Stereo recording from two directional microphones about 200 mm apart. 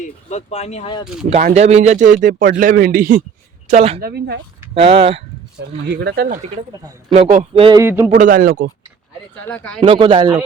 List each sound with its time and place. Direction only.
0.0 s speech: 35° left (ahead or behind)
1.0 s speech: centre (ahead or behind)
1.3 s speech: 35° right (ahead or behind)
3.7 s speech: 30° right (ahead or behind)
4.0 s speech: 55° right (ahead or behind)
4.7 s speech: 30° right (ahead or behind)
5.9 s speech: 55° right (ahead or behind)
7.5 s speech: 25° right (ahead or behind)
7.8 s a man's voice: 10° right (ahead or behind)
8.2 s speech: 40° right (ahead or behind)
9.3 s speech: 5° left (ahead or behind)
9.8 s speech: 25° right (ahead or behind)